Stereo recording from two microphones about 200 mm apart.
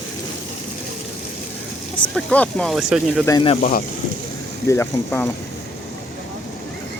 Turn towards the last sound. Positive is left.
turn(degrees=10)  # may be behind; listen again after turning